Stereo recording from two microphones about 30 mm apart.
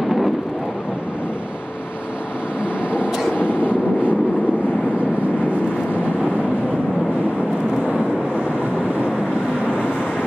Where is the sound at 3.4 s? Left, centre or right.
Right.